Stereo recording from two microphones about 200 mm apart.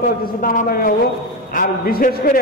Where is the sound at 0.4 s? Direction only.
45° left (ahead or behind).